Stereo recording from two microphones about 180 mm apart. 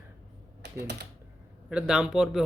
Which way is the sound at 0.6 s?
70° right (ahead or behind).